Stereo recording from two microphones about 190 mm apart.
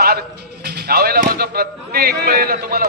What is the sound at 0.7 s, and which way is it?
A man's voice, 55° right (ahead or behind).